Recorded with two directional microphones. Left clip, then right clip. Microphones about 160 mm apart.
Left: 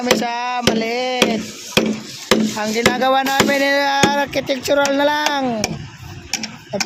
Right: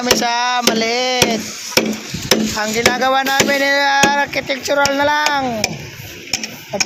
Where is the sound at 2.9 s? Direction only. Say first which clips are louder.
Left 1 dB; 30° left (ahead or behind).